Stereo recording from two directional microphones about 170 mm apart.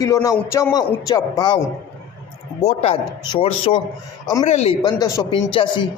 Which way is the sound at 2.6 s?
35° left (ahead or behind).